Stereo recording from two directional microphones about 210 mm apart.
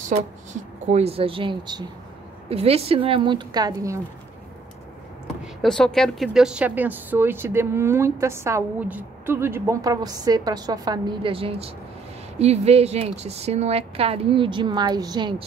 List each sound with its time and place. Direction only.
0.0 s a woman's voice: 35° right (ahead or behind); by 4.0 s 15° right (ahead or behind)
5.4 s a woman's voice: centre (ahead or behind); by 15.4 s 20° right (ahead or behind)